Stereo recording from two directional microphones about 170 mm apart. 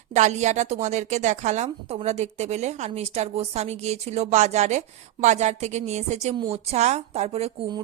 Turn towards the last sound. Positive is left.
turn(degrees=-40)  # may be behind; listen again after turning